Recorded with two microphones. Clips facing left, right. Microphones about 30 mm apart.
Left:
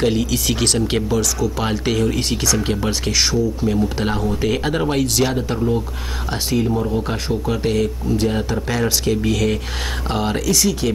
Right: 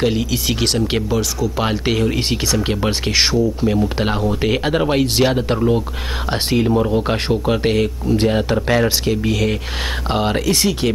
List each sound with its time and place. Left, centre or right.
0.0 s speech: centre
2.9 s speech: right
10.5 s speech: right